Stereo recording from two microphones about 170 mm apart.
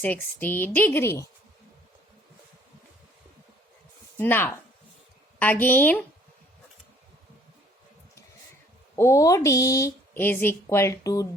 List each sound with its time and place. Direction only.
0.0 s speech: 10° left (ahead or behind)
4.2 s speech: 10° left (ahead or behind)
9.0 s speech: 20° left (ahead or behind)